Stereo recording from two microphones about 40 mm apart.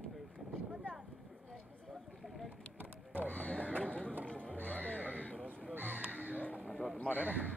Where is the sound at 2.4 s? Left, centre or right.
Right.